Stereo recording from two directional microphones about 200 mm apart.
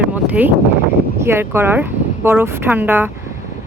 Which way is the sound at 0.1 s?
10° right (ahead or behind).